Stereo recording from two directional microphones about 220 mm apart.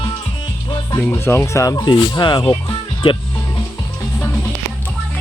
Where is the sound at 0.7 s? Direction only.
15° left (ahead or behind).